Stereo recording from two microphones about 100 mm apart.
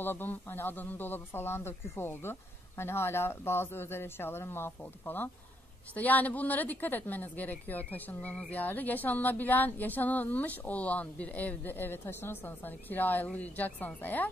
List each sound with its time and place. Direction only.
0.0 s speech: 20° left (ahead or behind)